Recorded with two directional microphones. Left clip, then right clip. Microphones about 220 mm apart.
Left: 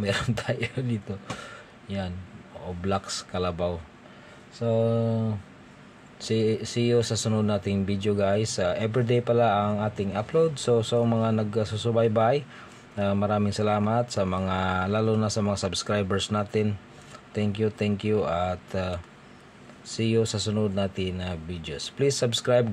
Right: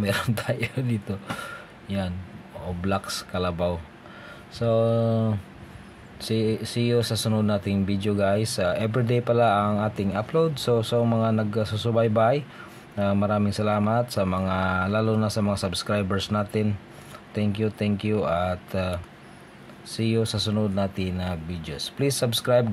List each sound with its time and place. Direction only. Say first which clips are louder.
0.0 s speech: right 1 dB; 5° right (ahead or behind)
4.6 s a sound: right 3 dB; 15° right (ahead or behind)
6.2 s speech: even; centre (ahead or behind)